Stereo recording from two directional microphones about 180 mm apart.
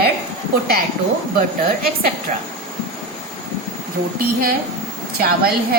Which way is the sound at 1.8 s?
55° right (ahead or behind).